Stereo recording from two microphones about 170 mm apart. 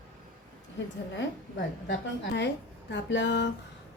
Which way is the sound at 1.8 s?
90° left.